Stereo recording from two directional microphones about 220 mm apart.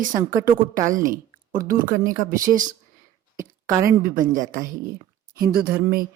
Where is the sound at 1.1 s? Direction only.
40° right (ahead or behind).